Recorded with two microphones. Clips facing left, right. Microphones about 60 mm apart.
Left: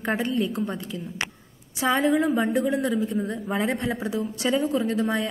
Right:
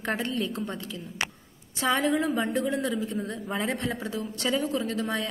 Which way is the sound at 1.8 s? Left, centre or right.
Centre.